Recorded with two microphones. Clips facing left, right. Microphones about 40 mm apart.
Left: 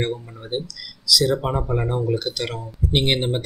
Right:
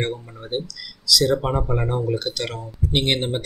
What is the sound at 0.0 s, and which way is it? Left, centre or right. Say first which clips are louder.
Speech: left 1 dB; centre.